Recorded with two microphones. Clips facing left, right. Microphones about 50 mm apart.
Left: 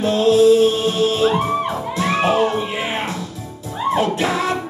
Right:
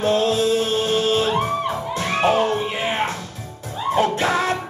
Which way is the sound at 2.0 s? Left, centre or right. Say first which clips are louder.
Left 2 dB; left.